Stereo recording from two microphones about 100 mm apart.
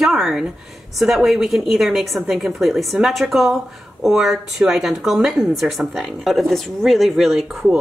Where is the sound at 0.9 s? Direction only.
Centre (ahead or behind).